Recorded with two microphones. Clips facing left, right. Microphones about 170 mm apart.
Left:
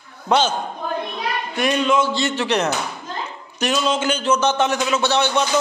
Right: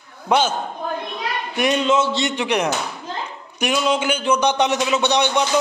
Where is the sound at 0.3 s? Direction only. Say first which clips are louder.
Even; 10° right (ahead or behind).